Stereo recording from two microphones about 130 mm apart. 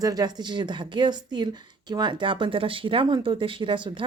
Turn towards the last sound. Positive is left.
turn(degrees=-40)  # may be behind; listen again after turning